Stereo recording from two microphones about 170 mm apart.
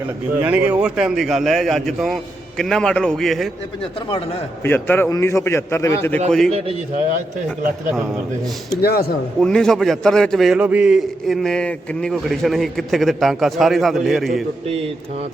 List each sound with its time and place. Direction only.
0.4 s a man's voice: 5° right (ahead or behind)
4.6 s a man's voice: 10° left (ahead or behind)
6.5 s a man's voice: 40° right (ahead or behind)
8.8 s speech: 65° left (ahead or behind)
9.4 s a man's voice: 5° left (ahead or behind)